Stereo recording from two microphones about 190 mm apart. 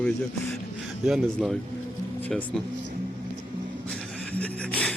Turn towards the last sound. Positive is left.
turn(degrees=5)  # may be behind; listen again after turning